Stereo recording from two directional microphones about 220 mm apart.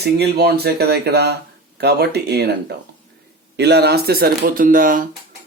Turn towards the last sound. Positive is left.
turn(degrees=-40)  # may be behind; listen again after turning